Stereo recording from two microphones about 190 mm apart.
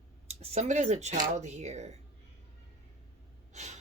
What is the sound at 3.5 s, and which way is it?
Gasp, 35° right (ahead or behind).